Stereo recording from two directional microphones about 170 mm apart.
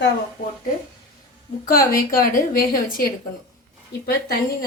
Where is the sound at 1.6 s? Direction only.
55° left (ahead or behind).